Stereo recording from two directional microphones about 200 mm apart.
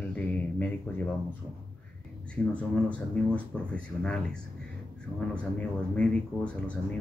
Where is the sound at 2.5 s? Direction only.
5° left (ahead or behind).